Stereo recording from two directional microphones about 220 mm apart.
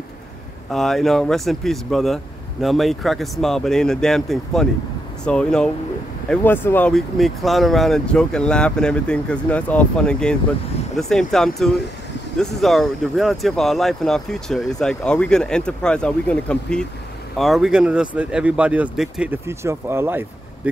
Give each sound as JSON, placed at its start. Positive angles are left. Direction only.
{"t": 0.7, "sound": "speech", "side_deg": 0}